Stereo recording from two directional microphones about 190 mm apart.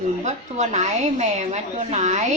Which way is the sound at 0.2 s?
40° right (ahead or behind).